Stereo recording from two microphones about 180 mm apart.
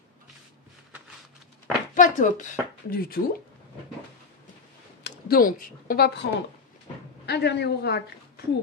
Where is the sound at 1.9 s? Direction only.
45° left (ahead or behind).